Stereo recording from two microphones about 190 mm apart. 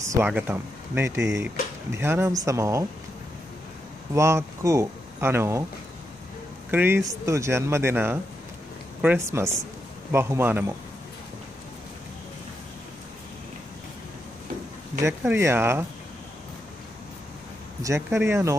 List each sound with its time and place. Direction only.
0.0 s speech: 10° right (ahead or behind)
4.1 s speech: 15° right (ahead or behind)
6.7 s speech: 10° right (ahead or behind)
15.0 s speech: 15° right (ahead or behind)
17.8 s speech: 15° right (ahead or behind)